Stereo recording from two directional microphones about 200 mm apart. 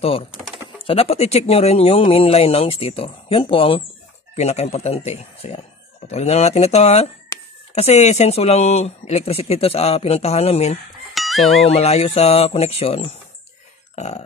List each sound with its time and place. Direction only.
0.3 s bird: 5° right (ahead or behind)
0.8 s speech: 30° left (ahead or behind)
11.1 s music: centre (ahead or behind)
11.7 s speech: 30° left (ahead or behind)
13.9 s burping: 35° left (ahead or behind)